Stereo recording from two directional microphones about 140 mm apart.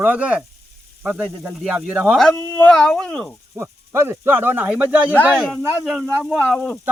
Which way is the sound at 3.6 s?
20° right (ahead or behind).